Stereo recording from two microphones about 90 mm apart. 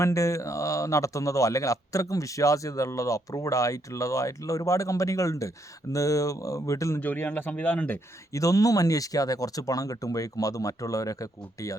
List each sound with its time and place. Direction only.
0.0 s speech: 35° left (ahead or behind)
7.0 s speech: 20° left (ahead or behind)
8.3 s speech: 40° left (ahead or behind)